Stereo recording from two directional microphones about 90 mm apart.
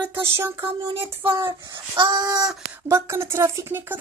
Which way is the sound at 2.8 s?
30° right (ahead or behind).